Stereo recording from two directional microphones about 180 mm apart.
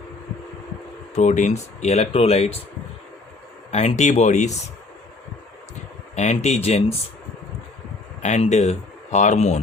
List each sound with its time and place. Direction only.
1.1 s speech: 40° left (ahead or behind)
3.7 s speech: 40° left (ahead or behind)
6.1 s speech: 40° left (ahead or behind)
8.2 s speech: 40° left (ahead or behind)